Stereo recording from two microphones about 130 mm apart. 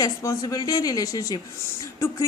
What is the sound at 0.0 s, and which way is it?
Speech, 25° left (ahead or behind).